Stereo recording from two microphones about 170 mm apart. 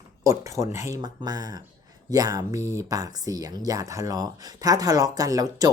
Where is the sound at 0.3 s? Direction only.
15° right (ahead or behind).